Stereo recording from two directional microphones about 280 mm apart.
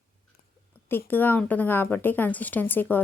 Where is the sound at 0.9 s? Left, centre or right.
Centre.